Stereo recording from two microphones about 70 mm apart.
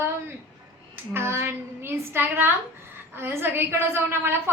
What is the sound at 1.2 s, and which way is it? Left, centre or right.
A woman's voice, right.